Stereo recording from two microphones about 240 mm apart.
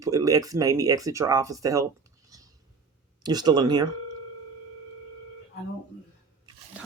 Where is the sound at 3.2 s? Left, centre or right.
Centre.